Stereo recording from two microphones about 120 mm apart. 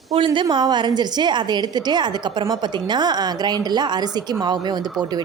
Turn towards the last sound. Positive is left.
turn(degrees=-35)  # may be behind; listen again after turning